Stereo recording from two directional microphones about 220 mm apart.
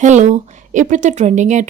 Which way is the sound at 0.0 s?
35° right (ahead or behind).